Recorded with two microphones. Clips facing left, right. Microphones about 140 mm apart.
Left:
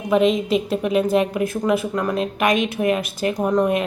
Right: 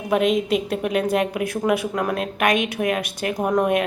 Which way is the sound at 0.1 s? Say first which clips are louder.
Left 2 dB; 5° right (ahead or behind).